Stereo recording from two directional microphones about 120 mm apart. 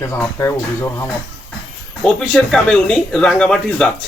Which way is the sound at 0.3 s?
20° left (ahead or behind).